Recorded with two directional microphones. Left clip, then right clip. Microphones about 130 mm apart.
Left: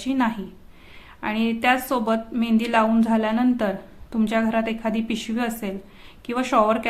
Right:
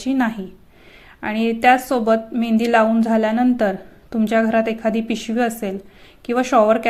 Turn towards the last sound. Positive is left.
turn(degrees=-30)  # may be behind; listen again after turning